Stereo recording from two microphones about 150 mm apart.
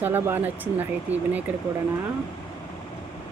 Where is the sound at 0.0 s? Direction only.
15° right (ahead or behind).